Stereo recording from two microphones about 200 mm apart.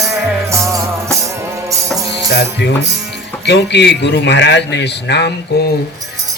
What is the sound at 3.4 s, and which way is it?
A man's voice, 60° left (ahead or behind).